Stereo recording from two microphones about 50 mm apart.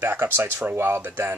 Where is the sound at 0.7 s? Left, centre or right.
Right.